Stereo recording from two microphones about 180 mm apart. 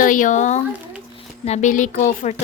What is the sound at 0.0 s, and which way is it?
A woman's voice, 45° left (ahead or behind).